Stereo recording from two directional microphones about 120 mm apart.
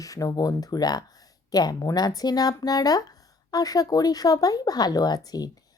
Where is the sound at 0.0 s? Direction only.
30° left (ahead or behind).